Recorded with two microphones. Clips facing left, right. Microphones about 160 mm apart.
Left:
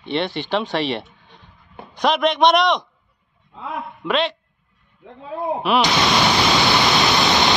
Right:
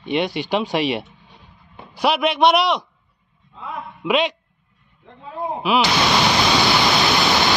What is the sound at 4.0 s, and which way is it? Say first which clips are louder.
Speech: right 2 dB; 10° right (ahead or behind).